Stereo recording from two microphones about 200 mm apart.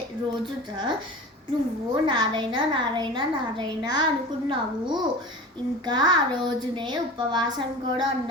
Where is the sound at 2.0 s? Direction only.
25° right (ahead or behind).